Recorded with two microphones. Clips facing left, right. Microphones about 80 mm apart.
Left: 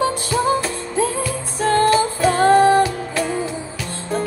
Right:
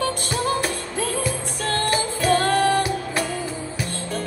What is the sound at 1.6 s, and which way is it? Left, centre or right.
Music, left.